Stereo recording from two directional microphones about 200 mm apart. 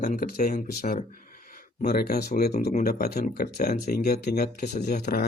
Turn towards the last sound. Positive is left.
turn(degrees=55)  # may be behind; listen again after turning